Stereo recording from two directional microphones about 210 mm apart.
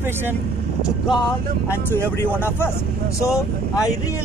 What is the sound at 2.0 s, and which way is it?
Speech, 10° left (ahead or behind).